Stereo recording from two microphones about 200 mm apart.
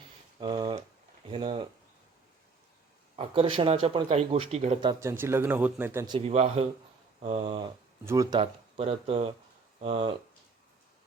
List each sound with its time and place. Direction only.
0.3 s a sound: 20° right (ahead or behind)
1.3 s speech: 25° right (ahead or behind)
3.2 s speech: 25° right (ahead or behind)
6.1 s speech: 30° right (ahead or behind)